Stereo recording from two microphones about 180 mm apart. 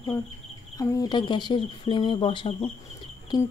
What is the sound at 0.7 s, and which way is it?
Speech, 20° left (ahead or behind).